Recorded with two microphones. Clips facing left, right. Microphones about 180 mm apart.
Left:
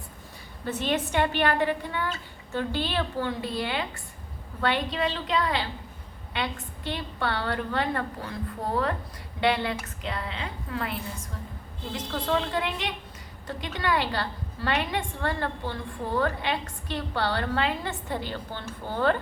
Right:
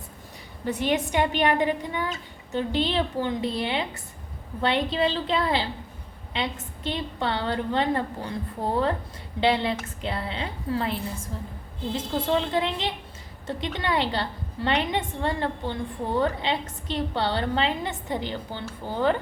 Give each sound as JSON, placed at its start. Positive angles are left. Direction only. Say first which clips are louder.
{"t": 0.6, "sound": "a woman's voice", "louder": "right 3 dB", "side_deg": -15}